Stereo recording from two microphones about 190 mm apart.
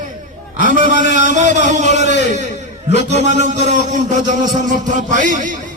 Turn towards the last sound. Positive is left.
turn(degrees=-45)  # may be behind; listen again after turning